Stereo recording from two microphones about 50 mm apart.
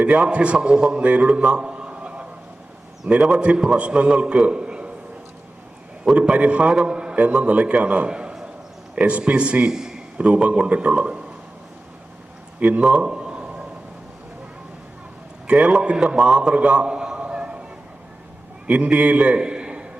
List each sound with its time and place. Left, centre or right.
0.0 s a man's voice: right
1.0 s a man's voice: right
6.1 s a man's voice: right
9.7 s a sound: centre
10.2 s a man's voice: right
12.5 s speech: right
12.8 s a sound: centre
15.4 s a man's voice: centre
18.7 s a man's voice: right